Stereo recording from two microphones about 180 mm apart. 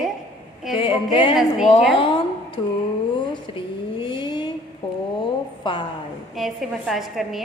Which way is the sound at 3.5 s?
25° left (ahead or behind).